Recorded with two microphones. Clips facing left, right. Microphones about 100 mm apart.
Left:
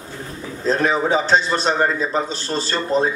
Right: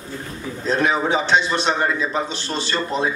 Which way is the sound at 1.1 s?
40° left (ahead or behind).